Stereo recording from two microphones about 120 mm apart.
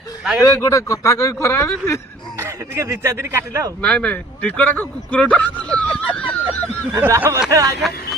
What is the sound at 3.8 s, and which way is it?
Speech, 10° left (ahead or behind).